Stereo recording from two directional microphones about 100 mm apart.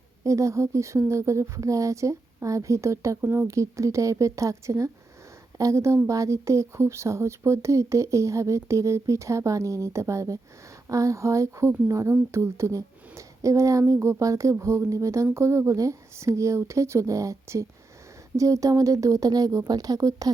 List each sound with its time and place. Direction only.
0.3 s a woman's voice: 30° right (ahead or behind)